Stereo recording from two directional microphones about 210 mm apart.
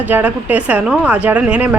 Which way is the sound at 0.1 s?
5° right (ahead or behind).